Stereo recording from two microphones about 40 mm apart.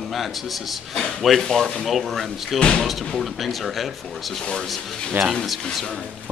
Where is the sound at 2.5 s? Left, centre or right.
Left.